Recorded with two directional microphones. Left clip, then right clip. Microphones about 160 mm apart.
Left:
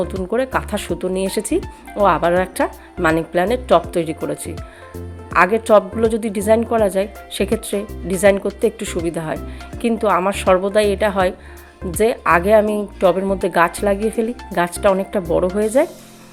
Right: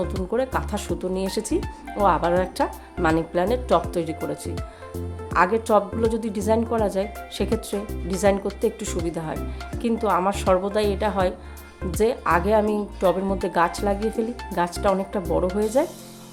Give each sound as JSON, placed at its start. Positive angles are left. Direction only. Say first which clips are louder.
{"t": 0.3, "sound": "speech", "louder": "left 5 dB", "side_deg": 20}
{"t": 5.3, "sound": "speech", "louder": "left 6 dB", "side_deg": 20}